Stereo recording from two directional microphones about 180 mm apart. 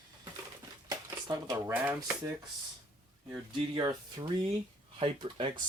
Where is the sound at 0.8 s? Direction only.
20° right (ahead or behind).